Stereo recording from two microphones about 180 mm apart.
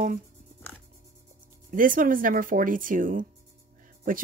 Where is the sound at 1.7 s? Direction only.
50° right (ahead or behind).